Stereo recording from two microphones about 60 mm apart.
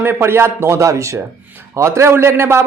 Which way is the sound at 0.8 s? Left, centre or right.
Right.